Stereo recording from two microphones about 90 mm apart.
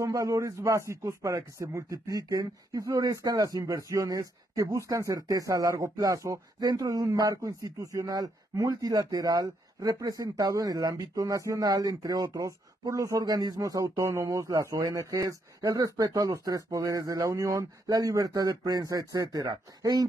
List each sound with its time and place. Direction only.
0.0 s speech: 35° right (ahead or behind)